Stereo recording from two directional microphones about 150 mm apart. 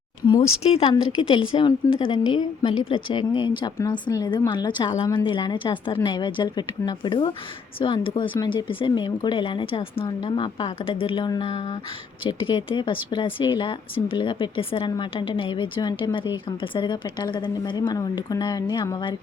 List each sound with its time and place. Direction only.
0.6 s speech: 40° left (ahead or behind)